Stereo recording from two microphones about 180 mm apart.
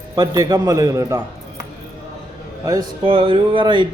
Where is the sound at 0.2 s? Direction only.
20° right (ahead or behind).